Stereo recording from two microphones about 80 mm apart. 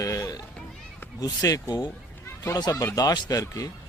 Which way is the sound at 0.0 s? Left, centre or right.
Left.